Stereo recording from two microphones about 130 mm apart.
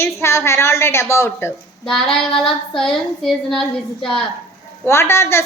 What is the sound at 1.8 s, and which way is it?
Speech, 5° left (ahead or behind).